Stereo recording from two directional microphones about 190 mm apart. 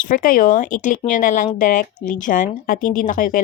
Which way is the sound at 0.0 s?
45° left (ahead or behind).